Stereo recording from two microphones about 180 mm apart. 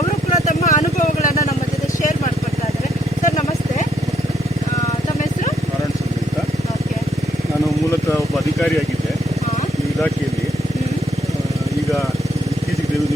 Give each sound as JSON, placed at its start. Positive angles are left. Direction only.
{"t": 0.3, "sound": "vehicle", "side_deg": 40}